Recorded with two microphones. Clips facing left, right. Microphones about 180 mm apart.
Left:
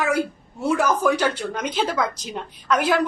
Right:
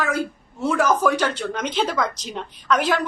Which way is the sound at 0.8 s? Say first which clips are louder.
Right 1 dB; 5° left (ahead or behind).